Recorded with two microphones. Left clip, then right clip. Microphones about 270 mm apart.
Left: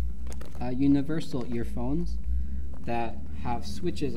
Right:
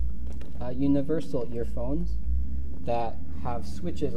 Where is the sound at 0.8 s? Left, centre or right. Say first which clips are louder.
Even; centre.